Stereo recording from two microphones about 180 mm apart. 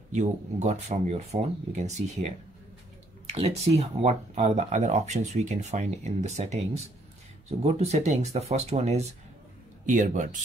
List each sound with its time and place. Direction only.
0.1 s speech: 40° right (ahead or behind)
3.3 s speech: 35° right (ahead or behind)